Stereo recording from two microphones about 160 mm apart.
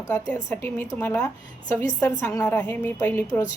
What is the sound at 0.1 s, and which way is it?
A woman's voice, 15° left (ahead or behind).